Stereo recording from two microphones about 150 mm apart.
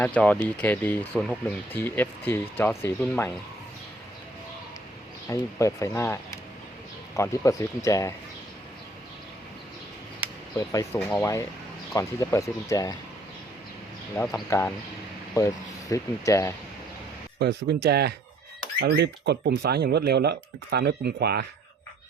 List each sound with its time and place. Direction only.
0.0 s speech: 10° left (ahead or behind)
5.3 s speech: 20° left (ahead or behind)
10.2 s a sound: 10° right (ahead or behind)
10.6 s speech: 20° left (ahead or behind)
15.4 s speech: 20° left (ahead or behind)
17.4 s speech: 90° right